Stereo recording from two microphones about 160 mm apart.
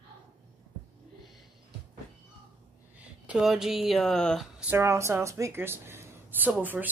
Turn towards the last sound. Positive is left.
turn(degrees=-10)  # may be behind; listen again after turning